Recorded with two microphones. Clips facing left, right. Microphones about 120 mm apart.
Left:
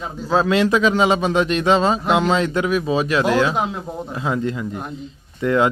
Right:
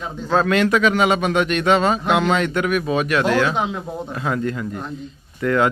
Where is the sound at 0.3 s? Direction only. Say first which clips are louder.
Even; 25° left (ahead or behind).